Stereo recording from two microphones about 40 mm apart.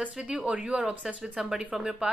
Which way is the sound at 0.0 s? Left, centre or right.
Right.